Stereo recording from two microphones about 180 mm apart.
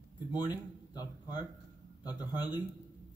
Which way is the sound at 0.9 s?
20° left (ahead or behind).